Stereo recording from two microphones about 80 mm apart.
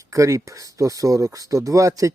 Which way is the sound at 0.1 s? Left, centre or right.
Right.